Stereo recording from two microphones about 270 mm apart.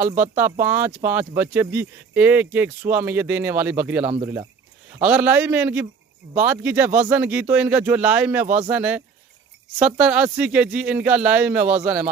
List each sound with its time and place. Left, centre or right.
0.5 s speech: centre
4.0 s a man's voice: right
5.0 s speech: centre